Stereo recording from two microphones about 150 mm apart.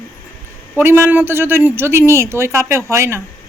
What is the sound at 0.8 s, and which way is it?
Speech, 15° right (ahead or behind).